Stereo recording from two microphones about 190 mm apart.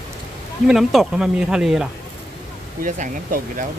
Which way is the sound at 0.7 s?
Centre (ahead or behind).